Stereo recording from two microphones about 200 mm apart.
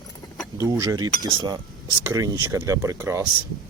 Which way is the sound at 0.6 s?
15° right (ahead or behind).